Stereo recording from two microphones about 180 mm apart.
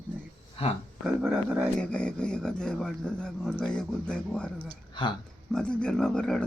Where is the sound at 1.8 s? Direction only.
5° left (ahead or behind).